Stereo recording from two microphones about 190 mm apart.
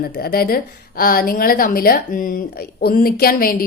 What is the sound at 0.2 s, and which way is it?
A woman's voice, 50° left (ahead or behind).